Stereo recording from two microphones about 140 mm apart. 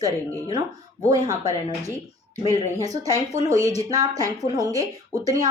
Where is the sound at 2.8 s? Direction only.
25° right (ahead or behind).